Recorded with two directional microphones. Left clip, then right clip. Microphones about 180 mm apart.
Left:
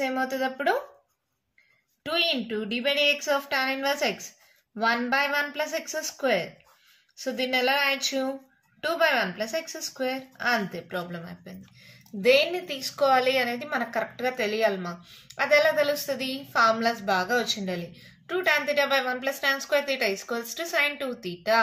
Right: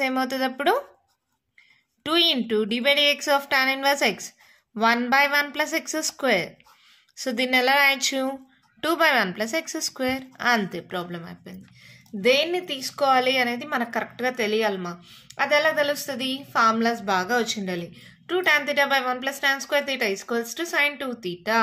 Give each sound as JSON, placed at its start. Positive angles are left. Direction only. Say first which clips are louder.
{"t": 0.0, "sound": "a woman's voice", "louder": "right 3 dB", "side_deg": -50}
{"t": 2.0, "sound": "a woman's voice", "louder": "right 5 dB", "side_deg": -50}